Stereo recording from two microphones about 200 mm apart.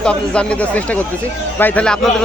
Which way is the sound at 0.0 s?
5° left (ahead or behind).